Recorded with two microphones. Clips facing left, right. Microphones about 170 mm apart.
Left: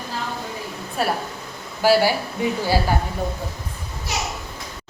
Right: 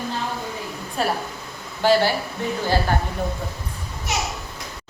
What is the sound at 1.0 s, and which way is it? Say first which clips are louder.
A woman's voice: left 1 dB; 5° left (ahead or behind).